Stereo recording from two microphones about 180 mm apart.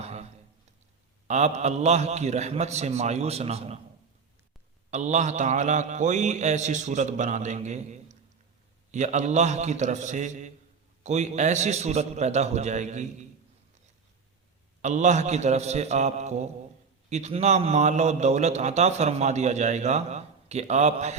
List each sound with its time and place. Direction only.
0.0 s a sound: 35° right (ahead or behind)
1.3 s a man's voice: 40° right (ahead or behind)
4.9 s a man's voice: 40° right (ahead or behind)
14.8 s a man's voice: 40° right (ahead or behind)